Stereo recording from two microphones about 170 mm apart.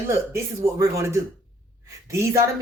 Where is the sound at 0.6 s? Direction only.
15° right (ahead or behind).